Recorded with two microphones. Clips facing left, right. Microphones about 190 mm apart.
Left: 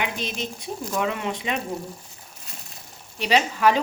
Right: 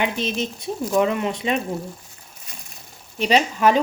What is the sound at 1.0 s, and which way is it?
Speech, 25° right (ahead or behind).